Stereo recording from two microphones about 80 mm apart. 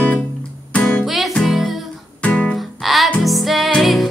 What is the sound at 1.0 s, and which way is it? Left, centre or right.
Music, centre.